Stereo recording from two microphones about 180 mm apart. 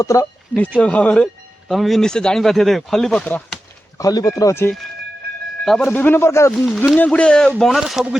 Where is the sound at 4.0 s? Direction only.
20° left (ahead or behind).